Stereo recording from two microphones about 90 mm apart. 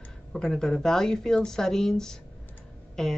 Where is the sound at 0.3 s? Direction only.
5° left (ahead or behind).